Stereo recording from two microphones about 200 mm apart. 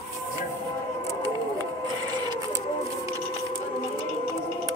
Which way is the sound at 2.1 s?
20° right (ahead or behind).